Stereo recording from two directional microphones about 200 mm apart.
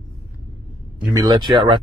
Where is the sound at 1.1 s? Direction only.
20° right (ahead or behind).